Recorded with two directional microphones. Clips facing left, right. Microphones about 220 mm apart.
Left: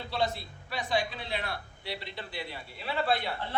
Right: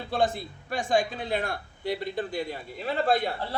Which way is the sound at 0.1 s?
50° right (ahead or behind).